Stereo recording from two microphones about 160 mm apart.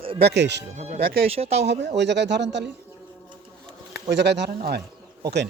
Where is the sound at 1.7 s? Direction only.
90° right.